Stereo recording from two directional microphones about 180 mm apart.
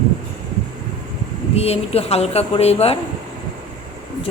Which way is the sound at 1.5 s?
35° left (ahead or behind).